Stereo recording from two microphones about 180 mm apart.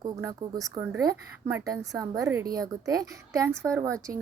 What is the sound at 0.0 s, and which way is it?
A woman's voice, 20° right (ahead or behind).